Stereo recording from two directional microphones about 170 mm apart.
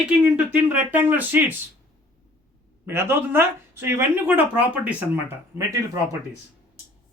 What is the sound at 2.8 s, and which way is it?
Speech, 15° right (ahead or behind).